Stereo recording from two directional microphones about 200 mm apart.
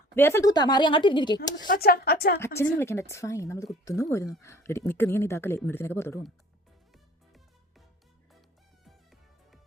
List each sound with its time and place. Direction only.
0.2 s speech: 10° left (ahead or behind)
1.6 s a woman's voice: 45° left (ahead or behind)
2.4 s speech: 10° left (ahead or behind)